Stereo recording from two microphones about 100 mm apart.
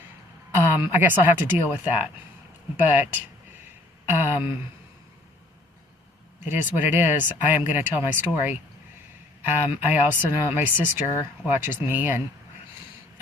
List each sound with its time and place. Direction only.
0.5 s speech: 20° right (ahead or behind)
6.4 s speech: 20° right (ahead or behind)